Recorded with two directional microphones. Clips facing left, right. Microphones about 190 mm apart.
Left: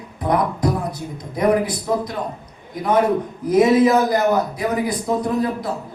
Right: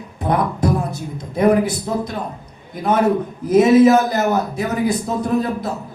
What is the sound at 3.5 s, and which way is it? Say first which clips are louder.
Speech: right 3 dB; 25° right (ahead or behind).